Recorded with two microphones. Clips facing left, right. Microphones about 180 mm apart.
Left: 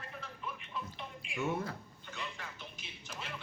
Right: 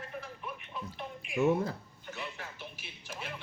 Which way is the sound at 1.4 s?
35° right (ahead or behind).